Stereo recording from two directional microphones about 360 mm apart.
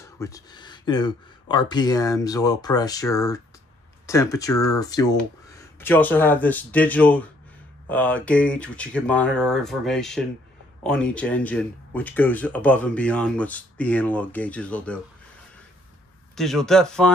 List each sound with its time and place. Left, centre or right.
0.2 s speech: centre
16.3 s speech: centre